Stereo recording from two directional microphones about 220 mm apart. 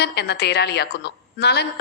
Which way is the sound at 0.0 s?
50° left (ahead or behind).